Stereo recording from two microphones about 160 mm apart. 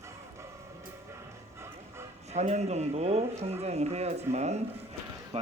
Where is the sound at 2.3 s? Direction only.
45° right (ahead or behind).